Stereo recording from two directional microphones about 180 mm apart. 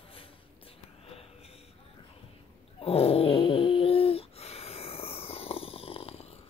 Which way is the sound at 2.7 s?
35° left (ahead or behind).